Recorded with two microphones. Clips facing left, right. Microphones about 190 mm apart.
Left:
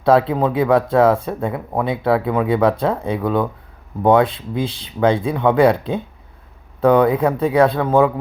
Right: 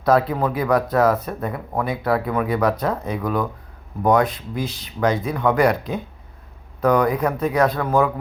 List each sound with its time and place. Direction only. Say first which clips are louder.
0.0 s speech: left 3 dB; 25° left (ahead or behind)